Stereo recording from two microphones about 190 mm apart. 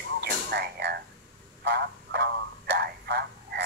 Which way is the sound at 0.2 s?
60° right (ahead or behind).